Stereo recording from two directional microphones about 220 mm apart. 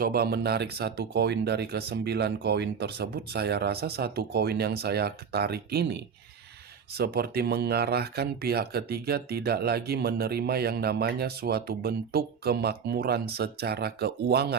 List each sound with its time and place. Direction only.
0.0 s speech: 45° right (ahead or behind)